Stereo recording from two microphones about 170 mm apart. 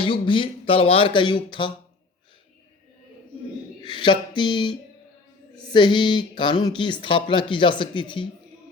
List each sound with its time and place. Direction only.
0.0 s speech: 30° left (ahead or behind)
3.8 s speech: 30° left (ahead or behind)